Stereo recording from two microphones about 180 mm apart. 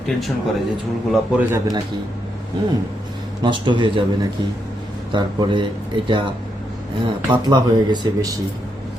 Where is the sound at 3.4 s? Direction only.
25° right (ahead or behind).